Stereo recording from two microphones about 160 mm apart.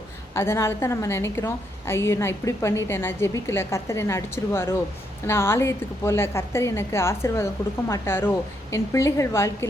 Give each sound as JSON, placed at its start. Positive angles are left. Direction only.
{"t": 0.3, "sound": "a woman's voice", "side_deg": 15}